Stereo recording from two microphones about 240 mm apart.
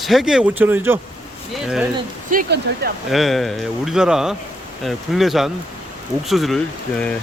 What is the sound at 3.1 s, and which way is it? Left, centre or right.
Speech, centre.